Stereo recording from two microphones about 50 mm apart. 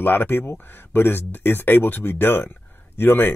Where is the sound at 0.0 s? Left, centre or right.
Left.